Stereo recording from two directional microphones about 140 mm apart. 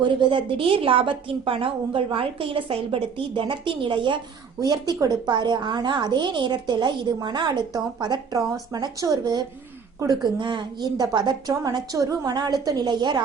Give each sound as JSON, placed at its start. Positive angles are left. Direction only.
{"t": 0.0, "sound": "a woman's voice", "side_deg": -35}